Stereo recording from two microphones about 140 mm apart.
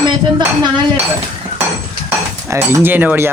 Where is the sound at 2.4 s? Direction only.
15° right (ahead or behind).